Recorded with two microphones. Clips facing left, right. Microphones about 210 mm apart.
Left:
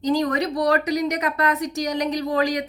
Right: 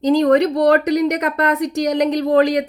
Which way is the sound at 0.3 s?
60° right (ahead or behind).